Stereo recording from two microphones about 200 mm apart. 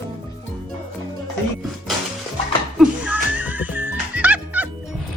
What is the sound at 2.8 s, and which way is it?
Music, 5° right (ahead or behind).